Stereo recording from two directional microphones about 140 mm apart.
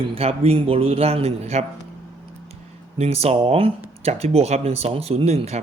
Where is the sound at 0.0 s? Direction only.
45° right (ahead or behind).